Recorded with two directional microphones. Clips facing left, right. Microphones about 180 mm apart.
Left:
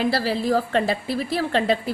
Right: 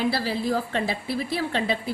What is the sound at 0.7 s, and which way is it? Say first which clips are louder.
Speech: left 5 dB; 90° left.